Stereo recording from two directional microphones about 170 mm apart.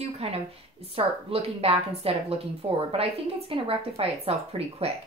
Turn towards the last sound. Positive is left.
turn(degrees=-35)  # may be behind; listen again after turning